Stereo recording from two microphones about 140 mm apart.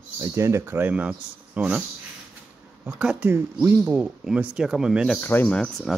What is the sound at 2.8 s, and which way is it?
Speech, 10° right (ahead or behind).